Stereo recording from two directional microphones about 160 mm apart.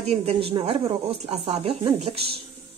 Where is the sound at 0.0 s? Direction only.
40° right (ahead or behind).